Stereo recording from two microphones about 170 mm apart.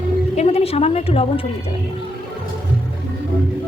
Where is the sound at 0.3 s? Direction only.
35° left (ahead or behind).